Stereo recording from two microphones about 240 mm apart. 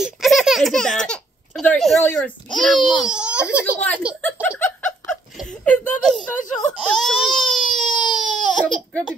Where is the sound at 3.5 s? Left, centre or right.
Centre.